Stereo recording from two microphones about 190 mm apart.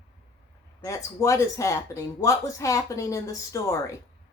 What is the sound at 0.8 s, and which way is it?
Speech, 15° left (ahead or behind).